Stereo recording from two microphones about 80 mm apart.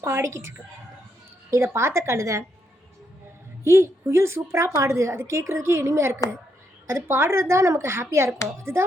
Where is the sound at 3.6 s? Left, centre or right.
Right.